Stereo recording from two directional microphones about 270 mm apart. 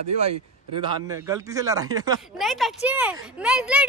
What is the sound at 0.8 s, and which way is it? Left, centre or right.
Speech, centre.